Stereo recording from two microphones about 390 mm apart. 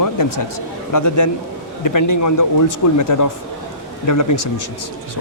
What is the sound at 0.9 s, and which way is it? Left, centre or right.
Speech, left.